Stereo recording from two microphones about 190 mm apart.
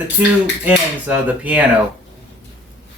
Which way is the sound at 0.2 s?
10° right (ahead or behind).